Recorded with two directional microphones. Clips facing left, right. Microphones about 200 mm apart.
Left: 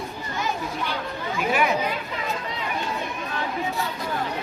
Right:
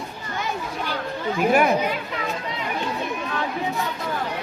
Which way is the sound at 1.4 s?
50° right (ahead or behind).